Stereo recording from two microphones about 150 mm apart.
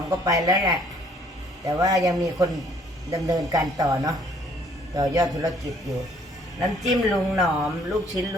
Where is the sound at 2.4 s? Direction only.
Centre (ahead or behind).